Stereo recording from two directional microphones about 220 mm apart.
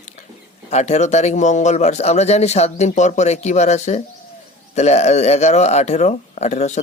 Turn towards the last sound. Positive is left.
turn(degrees=30)  # may be behind; listen again after turning